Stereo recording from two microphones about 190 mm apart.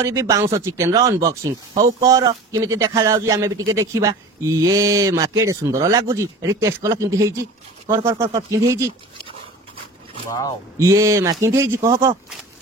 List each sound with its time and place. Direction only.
0.0 s speech: 15° right (ahead or behind)
10.8 s speech: 15° right (ahead or behind)